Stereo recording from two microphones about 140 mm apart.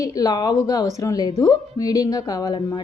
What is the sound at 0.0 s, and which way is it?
A woman's voice, 25° left (ahead or behind).